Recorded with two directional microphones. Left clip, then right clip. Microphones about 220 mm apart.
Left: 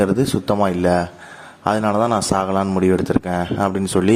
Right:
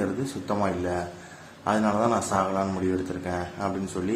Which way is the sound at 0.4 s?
45° left (ahead or behind).